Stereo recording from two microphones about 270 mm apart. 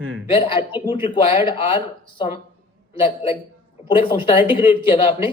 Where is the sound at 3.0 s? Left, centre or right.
Centre.